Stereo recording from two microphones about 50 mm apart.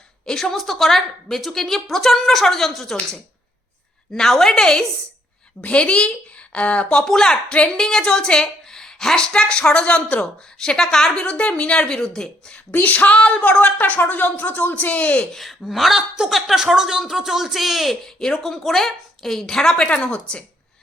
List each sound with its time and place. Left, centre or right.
0.3 s a woman's voice: centre
0.5 s a woman's voice: centre
5.6 s a woman's voice: left
7.0 s a woman's voice: centre
12.8 s a woman's voice: left
15.3 s a woman's voice: centre
18.0 s a woman's voice: centre